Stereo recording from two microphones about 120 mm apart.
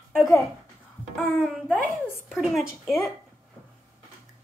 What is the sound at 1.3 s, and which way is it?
A child's voice, 5° right (ahead or behind).